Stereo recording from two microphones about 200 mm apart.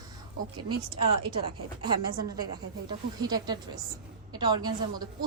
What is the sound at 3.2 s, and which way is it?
A woman's voice, 20° right (ahead or behind).